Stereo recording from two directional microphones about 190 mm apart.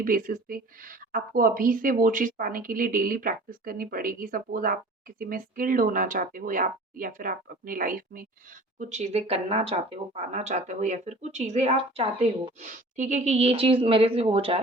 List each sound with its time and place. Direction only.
0.0 s speech: 45° right (ahead or behind); by 14.6 s 30° right (ahead or behind)